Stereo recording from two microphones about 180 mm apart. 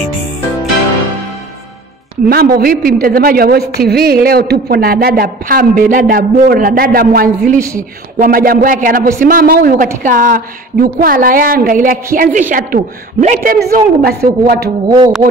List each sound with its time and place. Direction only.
2.2 s a woman's voice: 55° right (ahead or behind)
7.5 s speech: 15° right (ahead or behind)
8.2 s speech: 50° right (ahead or behind)
14.9 s music: 20° right (ahead or behind)